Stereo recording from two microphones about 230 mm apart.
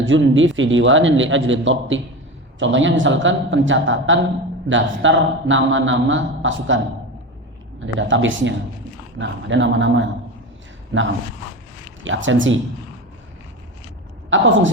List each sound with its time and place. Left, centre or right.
0.0 s a man's voice: right
7.9 s a man's voice: right
14.3 s a woman's voice: right